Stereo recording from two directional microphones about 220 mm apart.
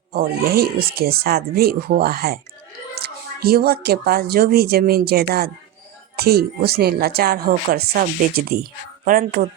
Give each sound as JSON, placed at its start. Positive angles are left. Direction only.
{"t": 0.1, "sound": "speech", "side_deg": -45}